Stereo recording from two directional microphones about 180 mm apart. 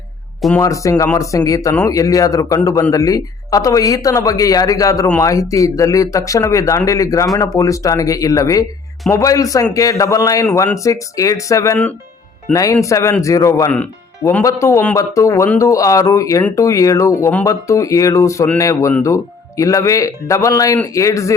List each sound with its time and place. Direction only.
0.6 s speech: 15° left (ahead or behind)